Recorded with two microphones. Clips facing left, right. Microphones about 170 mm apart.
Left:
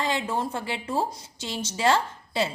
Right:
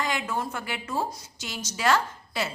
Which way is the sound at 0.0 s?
30° left (ahead or behind).